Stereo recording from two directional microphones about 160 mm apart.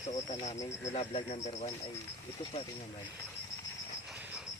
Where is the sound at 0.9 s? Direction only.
40° left (ahead or behind).